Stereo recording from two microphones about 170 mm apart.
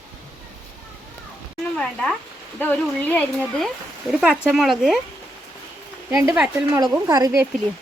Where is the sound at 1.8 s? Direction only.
5° left (ahead or behind).